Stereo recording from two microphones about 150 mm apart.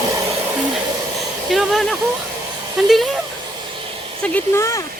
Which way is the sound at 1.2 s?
Centre (ahead or behind).